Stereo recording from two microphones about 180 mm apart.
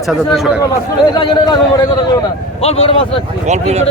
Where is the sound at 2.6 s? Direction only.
35° left (ahead or behind).